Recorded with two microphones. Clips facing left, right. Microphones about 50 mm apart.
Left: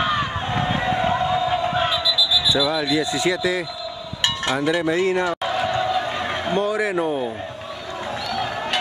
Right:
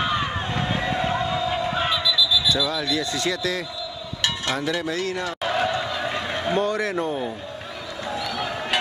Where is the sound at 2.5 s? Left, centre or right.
Centre.